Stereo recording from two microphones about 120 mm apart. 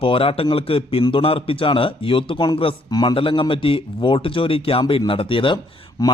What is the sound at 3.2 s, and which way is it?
A man's voice, 45° left (ahead or behind).